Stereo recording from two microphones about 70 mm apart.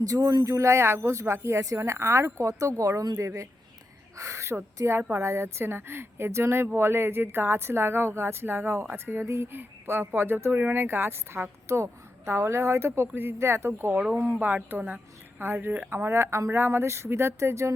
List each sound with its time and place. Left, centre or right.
0.0 s speech: right
0.5 s speech: right
3.2 s speech: right
11.7 s speech: right; by 15.0 s centre
15.4 s speech: right